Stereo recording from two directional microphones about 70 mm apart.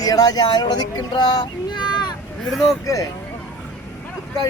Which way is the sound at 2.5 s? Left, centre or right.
Centre.